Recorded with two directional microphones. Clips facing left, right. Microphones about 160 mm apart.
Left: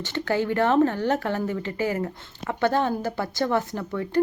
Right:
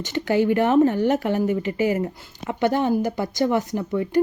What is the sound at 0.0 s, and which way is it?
Speech, 15° right (ahead or behind).